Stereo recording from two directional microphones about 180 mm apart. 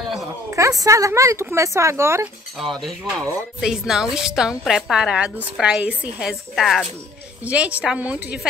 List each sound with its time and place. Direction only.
0.5 s a woman's voice: 15° right (ahead or behind)
2.6 s a woman's voice: centre (ahead or behind)